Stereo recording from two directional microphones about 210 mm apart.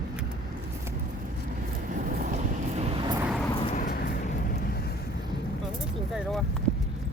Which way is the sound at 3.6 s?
35° left (ahead or behind).